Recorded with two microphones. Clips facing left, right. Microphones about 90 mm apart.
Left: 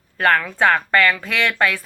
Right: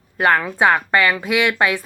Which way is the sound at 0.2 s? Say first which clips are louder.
Right 1 dB; 15° right (ahead or behind).